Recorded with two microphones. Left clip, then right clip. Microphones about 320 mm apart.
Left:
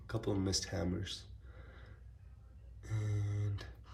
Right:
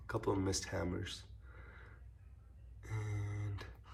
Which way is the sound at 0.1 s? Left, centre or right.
Centre.